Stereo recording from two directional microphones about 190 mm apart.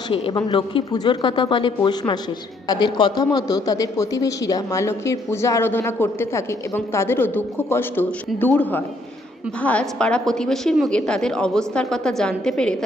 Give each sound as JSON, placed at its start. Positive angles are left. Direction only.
{"t": 0.1, "sound": "a woman's voice", "side_deg": 25}